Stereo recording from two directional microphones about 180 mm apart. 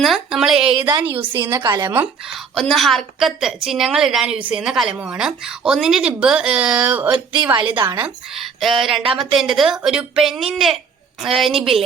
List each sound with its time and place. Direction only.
0.0 s a woman's voice: centre (ahead or behind)
0.8 s a woman's voice: 25° right (ahead or behind)
2.6 s a woman's voice: centre (ahead or behind)
7.5 s a woman's voice: 25° right (ahead or behind)
7.9 s a woman's voice: 5° right (ahead or behind)